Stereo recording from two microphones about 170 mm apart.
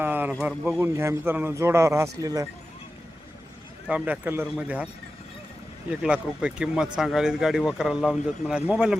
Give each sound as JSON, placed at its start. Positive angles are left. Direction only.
{"t": 0.0, "sound": "a man's voice", "side_deg": -10}
{"t": 3.8, "sound": "a man's voice", "side_deg": -10}
{"t": 5.9, "sound": "speech", "side_deg": -5}